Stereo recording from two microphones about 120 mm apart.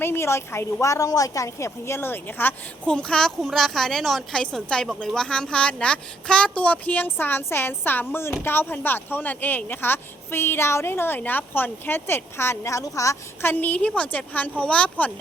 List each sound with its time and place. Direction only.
0.0 s a woman's voice: 20° left (ahead or behind)
13.5 s a woman's voice: 15° left (ahead or behind)